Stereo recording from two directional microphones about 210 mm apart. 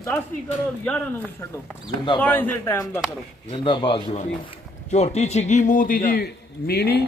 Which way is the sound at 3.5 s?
25° left (ahead or behind).